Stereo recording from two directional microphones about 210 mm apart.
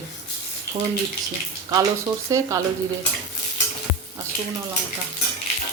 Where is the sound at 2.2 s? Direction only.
15° right (ahead or behind).